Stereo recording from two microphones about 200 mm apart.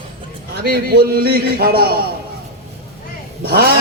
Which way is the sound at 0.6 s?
50° right (ahead or behind).